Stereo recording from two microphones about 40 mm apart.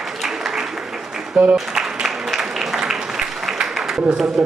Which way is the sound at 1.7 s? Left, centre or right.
Centre.